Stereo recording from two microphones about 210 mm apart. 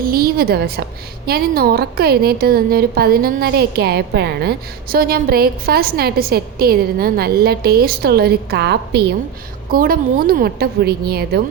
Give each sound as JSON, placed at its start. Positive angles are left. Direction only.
{"t": 0.0, "sound": "a woman's voice", "side_deg": -45}